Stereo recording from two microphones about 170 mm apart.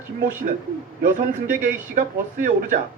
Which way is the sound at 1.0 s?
50° right (ahead or behind).